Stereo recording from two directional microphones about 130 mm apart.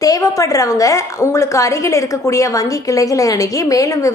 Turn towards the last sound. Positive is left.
turn(degrees=25)  # may be behind; listen again after turning